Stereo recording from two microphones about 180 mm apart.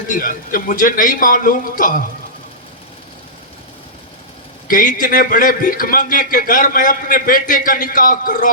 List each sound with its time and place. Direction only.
0.1 s a man's voice: 50° left (ahead or behind)
4.7 s a man's voice: 45° left (ahead or behind)